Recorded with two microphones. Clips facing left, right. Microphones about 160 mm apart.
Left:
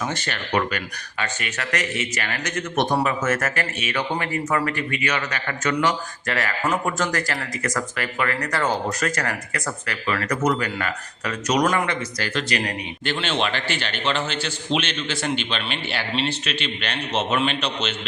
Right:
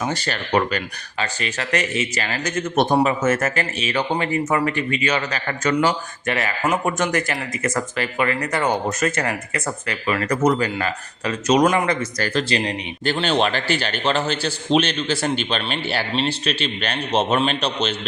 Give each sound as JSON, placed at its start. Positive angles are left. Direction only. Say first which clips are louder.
{"t": 0.0, "sound": "a man's voice", "louder": "right 3 dB", "side_deg": -35}
{"t": 11.9, "sound": "a man's voice", "louder": "right 5 dB", "side_deg": -35}